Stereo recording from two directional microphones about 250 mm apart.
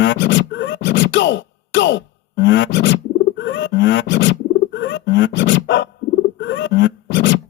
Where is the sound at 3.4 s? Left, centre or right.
Left.